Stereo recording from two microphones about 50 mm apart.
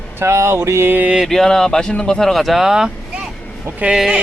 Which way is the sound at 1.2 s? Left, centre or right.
Centre.